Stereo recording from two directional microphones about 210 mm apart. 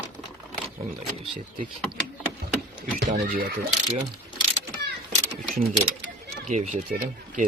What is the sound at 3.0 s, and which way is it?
Speech, 45° right (ahead or behind).